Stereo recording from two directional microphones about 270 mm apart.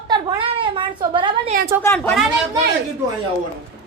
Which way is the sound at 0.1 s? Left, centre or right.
Centre.